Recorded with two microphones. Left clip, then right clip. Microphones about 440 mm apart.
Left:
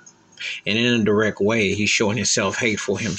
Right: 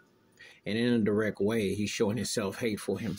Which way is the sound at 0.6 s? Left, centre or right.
Right.